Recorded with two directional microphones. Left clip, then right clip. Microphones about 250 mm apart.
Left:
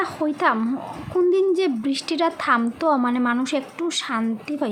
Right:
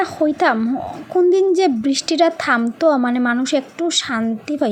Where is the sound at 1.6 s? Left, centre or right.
Centre.